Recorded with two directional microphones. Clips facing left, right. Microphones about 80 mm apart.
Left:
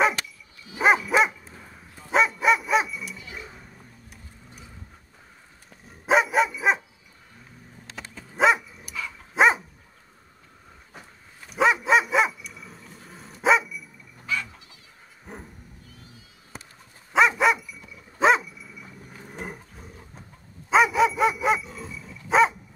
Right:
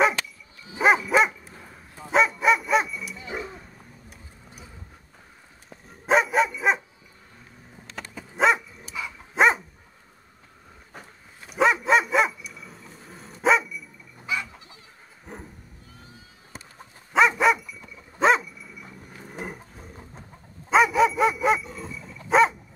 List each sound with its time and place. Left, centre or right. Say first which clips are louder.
0.7 s dog: even; centre
3.2 s dog: right 7 dB; right
3.4 s dog: right 4 dB; centre
5.9 s dog: even; centre
8.4 s dog: left 1 dB; centre
10.9 s dog: right 2 dB; centre
14.2 s goat: even; centre
15.3 s dog: even; centre
17.1 s dog: even; centre